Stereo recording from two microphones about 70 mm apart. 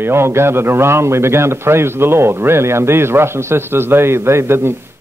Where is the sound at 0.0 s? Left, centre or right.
Right.